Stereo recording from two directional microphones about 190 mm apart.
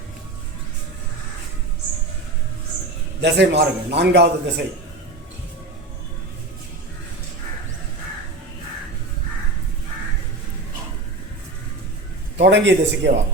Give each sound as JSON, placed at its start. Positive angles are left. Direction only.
{"t": 3.2, "sound": "a man's voice", "side_deg": -65}
{"t": 12.4, "sound": "a man's voice", "side_deg": -70}